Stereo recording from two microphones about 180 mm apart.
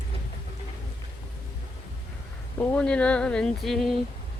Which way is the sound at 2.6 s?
5° left (ahead or behind).